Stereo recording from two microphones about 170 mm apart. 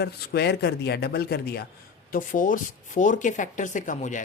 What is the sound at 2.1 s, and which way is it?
Speech, 50° left (ahead or behind).